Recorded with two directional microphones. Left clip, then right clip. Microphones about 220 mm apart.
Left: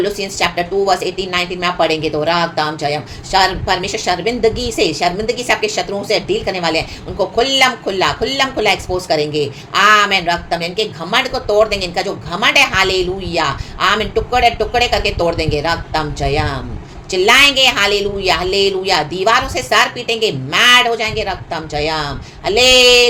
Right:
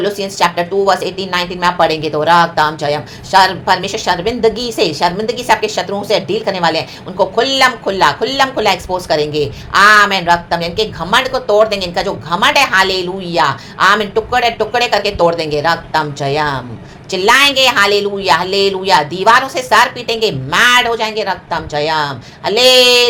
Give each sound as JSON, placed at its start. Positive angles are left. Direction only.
{"t": 0.0, "sound": "a woman's voice", "side_deg": -15}